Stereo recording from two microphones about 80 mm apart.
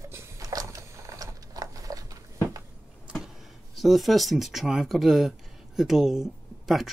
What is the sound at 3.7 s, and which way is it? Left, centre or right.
Speech, centre.